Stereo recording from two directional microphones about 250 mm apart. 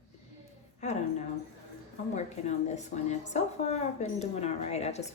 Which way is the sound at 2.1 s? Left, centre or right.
Left.